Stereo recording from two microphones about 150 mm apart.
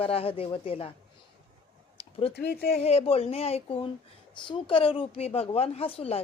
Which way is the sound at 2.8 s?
40° left (ahead or behind).